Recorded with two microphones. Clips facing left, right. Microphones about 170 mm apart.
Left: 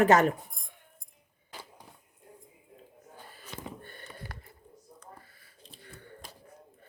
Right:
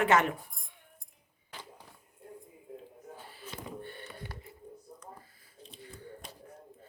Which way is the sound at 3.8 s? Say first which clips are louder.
Right 3 dB; 45° left (ahead or behind).